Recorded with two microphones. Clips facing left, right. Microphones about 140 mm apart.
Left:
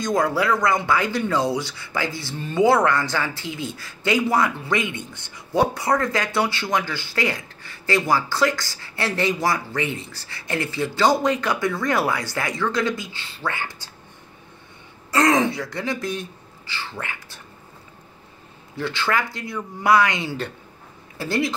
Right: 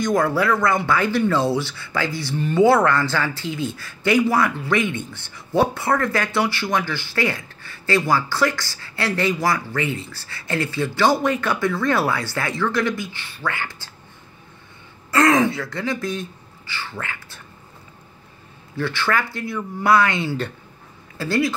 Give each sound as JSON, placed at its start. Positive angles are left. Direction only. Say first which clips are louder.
{"t": 0.0, "sound": "speech", "louder": "right 2 dB", "side_deg": 20}
{"t": 15.1, "sound": "speech", "louder": "right 2 dB", "side_deg": 20}
{"t": 18.8, "sound": "speech", "louder": "right 1 dB", "side_deg": 20}